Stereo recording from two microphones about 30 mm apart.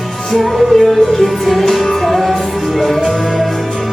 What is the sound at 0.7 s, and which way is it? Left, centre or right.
Music, centre.